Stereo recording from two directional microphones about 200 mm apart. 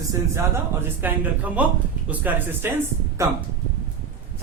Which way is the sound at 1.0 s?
10° right (ahead or behind).